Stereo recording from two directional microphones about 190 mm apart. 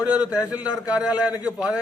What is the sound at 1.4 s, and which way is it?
Speech, 5° right (ahead or behind).